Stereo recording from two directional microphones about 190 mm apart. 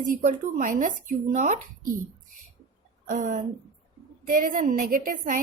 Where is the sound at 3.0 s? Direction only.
45° right (ahead or behind).